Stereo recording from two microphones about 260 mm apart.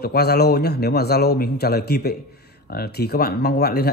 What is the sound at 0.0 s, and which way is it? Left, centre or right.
Speech, left.